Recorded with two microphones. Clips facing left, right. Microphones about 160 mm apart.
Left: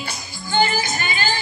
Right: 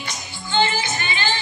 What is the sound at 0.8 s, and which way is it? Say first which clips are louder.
Music: left 1 dB; 40° left (ahead or behind).